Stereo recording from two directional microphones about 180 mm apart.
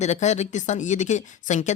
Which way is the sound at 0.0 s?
40° left (ahead or behind).